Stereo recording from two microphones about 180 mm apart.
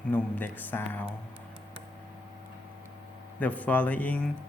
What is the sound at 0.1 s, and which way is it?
Speech, 10° left (ahead or behind).